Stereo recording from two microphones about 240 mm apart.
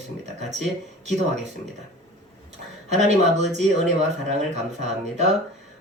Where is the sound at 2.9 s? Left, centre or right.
Right.